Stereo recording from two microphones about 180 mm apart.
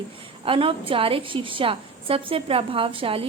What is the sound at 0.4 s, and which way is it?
A woman's voice, 30° right (ahead or behind).